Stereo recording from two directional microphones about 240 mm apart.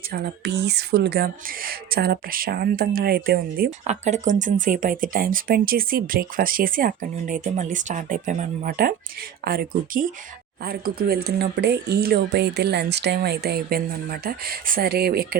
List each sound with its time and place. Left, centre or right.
0.1 s speech: right